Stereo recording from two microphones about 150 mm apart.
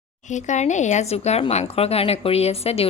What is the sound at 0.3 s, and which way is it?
A woman's voice, 55° left (ahead or behind).